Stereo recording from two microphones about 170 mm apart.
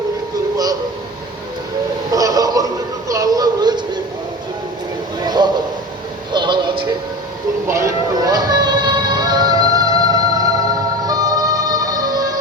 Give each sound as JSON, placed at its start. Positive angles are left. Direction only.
{"t": 0.5, "sound": "music", "side_deg": -20}
{"t": 2.1, "sound": "a sound", "side_deg": -20}
{"t": 3.1, "sound": "music", "side_deg": -20}
{"t": 5.2, "sound": "a sound", "side_deg": -25}
{"t": 6.3, "sound": "music", "side_deg": -25}
{"t": 7.7, "sound": "music", "side_deg": -15}
{"t": 11.0, "sound": "emergency vehicle", "side_deg": -20}